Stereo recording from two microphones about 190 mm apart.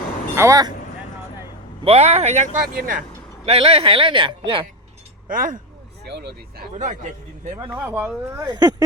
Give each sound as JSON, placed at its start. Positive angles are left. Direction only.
{"t": 0.3, "sound": "speech", "side_deg": -15}
{"t": 1.8, "sound": "speech", "side_deg": -30}
{"t": 3.4, "sound": "speech", "side_deg": -30}
{"t": 5.3, "sound": "speech", "side_deg": -45}
{"t": 6.1, "sound": "speech", "side_deg": -60}
{"t": 7.6, "sound": "speech", "side_deg": -10}
{"t": 8.4, "sound": "speech", "side_deg": -20}